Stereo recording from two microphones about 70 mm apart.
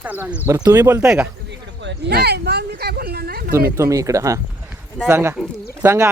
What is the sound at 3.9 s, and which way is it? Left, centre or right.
Speech, right.